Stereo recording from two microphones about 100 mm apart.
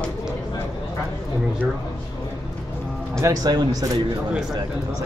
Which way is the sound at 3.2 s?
40° right (ahead or behind).